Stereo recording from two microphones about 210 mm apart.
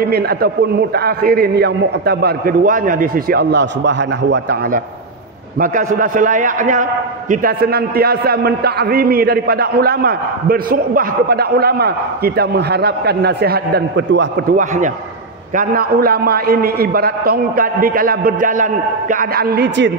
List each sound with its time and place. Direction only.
0.0 s a man's voice: 50° right (ahead or behind)
5.9 s a man's voice: 40° right (ahead or behind); by 14.2 s 55° right (ahead or behind)
14.5 s a man's voice: 40° right (ahead or behind)